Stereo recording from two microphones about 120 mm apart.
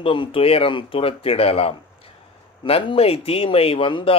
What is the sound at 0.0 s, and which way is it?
Speech, 45° left (ahead or behind).